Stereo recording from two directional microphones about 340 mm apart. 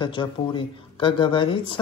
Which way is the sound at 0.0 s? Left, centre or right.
Centre.